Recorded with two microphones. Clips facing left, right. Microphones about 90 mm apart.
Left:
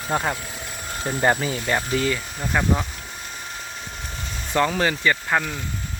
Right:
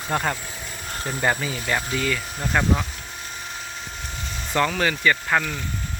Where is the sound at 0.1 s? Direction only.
10° left (ahead or behind).